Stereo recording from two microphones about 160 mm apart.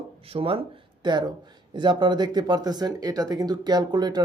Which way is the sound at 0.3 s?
35° right (ahead or behind).